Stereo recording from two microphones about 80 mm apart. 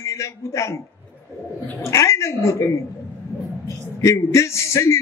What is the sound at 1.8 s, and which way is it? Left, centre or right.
A man's voice, left.